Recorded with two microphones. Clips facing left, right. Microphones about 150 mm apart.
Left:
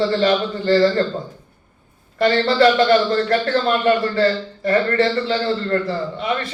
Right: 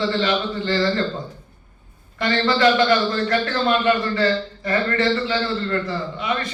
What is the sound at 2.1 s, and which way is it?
A man's voice, 40° left (ahead or behind).